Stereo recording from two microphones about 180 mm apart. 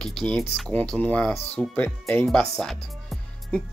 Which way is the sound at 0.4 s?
5° left (ahead or behind).